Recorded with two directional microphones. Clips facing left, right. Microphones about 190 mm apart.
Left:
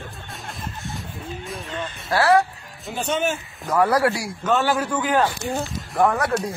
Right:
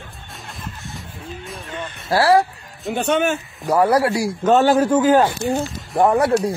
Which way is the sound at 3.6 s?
25° right (ahead or behind).